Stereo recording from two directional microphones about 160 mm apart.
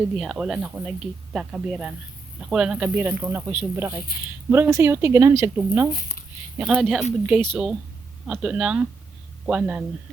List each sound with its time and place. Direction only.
0.2 s speech: 5° right (ahead or behind)
5.9 s speech: 60° left (ahead or behind)
6.6 s speech: 5° right (ahead or behind)